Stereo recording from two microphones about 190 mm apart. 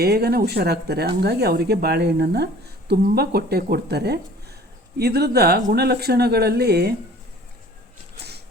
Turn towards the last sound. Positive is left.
turn(degrees=-60)  # may be behind; listen again after turning